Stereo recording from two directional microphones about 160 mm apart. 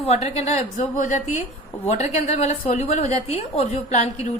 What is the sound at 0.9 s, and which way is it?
A woman's voice, 50° left (ahead or behind).